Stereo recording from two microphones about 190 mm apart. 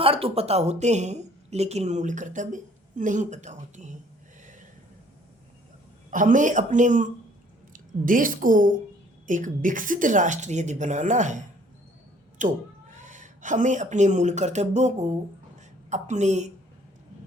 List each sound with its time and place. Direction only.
0.0 s a woman's voice: 30° right (ahead or behind)
6.1 s a woman's voice: 45° right (ahead or behind)
12.4 s a woman's voice: 40° right (ahead or behind)